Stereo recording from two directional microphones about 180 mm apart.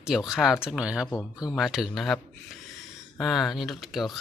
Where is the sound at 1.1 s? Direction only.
20° left (ahead or behind).